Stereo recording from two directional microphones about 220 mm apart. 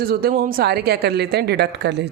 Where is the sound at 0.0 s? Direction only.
45° right (ahead or behind).